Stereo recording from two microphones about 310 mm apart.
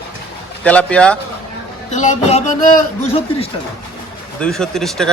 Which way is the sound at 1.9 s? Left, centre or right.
Left.